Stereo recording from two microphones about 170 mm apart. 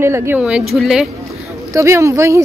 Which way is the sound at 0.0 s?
15° right (ahead or behind).